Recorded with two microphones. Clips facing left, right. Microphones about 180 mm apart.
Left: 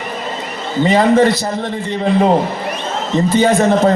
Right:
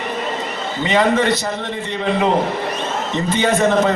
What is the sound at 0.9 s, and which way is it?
Speech, 35° left (ahead or behind).